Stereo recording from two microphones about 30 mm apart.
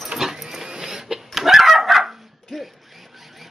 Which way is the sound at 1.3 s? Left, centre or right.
Centre.